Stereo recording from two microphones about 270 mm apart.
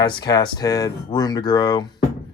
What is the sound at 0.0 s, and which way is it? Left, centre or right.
Speech, centre.